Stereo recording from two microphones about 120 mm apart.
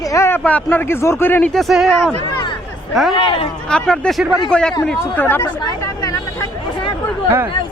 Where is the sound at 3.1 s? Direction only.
45° left (ahead or behind).